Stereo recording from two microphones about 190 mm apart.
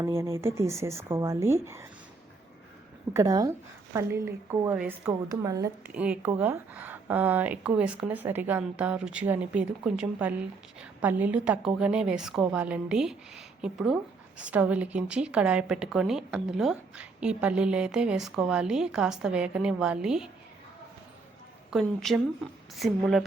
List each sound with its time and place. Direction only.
0.0 s speech: 15° right (ahead or behind)
3.1 s a woman's voice: 20° right (ahead or behind)
21.7 s a woman's voice: centre (ahead or behind)